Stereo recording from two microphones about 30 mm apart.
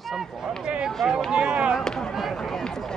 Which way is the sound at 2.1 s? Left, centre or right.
Centre.